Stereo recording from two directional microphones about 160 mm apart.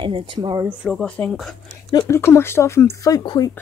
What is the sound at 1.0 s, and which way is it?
Speech, 5° left (ahead or behind).